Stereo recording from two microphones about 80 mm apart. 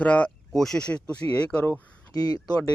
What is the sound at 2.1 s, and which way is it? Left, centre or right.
Speech, left.